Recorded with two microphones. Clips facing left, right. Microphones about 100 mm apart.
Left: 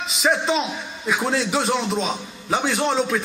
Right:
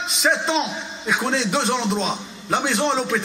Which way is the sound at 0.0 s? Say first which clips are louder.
Even; centre (ahead or behind).